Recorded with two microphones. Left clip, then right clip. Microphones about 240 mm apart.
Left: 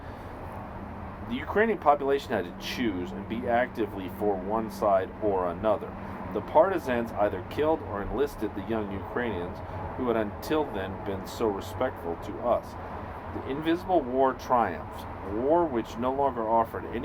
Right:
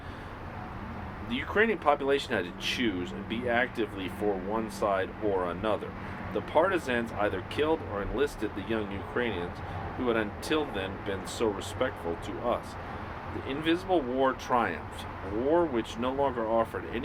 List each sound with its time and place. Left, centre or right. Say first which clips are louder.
1.3 s speech: left 1 dB; left